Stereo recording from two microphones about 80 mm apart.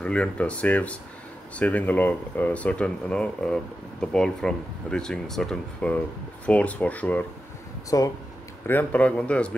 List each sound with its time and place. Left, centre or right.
0.0 s speech: centre
7.9 s speech: left
8.6 s speech: centre